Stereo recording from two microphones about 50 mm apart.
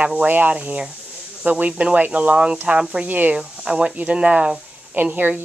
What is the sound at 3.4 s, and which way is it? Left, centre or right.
Speech, centre.